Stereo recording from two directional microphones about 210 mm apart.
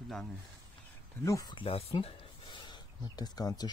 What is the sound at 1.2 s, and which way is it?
Speech, 15° left (ahead or behind).